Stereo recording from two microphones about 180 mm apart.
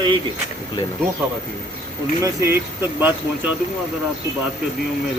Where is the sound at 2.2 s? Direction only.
15° right (ahead or behind).